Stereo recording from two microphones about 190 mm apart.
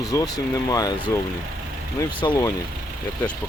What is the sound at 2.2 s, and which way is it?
Speech, 20° left (ahead or behind).